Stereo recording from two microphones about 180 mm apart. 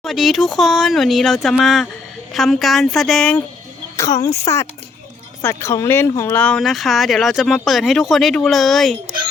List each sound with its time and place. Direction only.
0.0 s speech: centre (ahead or behind)
3.9 s speech: 20° left (ahead or behind); by 9.0 s centre (ahead or behind)